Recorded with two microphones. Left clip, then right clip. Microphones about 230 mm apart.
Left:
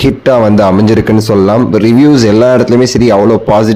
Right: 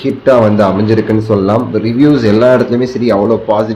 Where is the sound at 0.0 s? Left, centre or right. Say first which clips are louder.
Left 1 dB; left.